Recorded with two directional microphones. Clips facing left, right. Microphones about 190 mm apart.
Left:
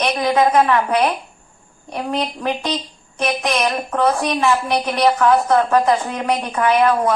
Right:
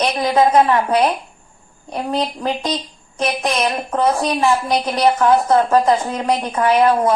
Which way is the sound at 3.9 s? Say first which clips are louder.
Right 1 dB; 25° right (ahead or behind).